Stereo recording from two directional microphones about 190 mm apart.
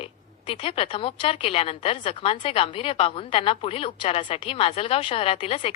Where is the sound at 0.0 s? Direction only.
30° left (ahead or behind).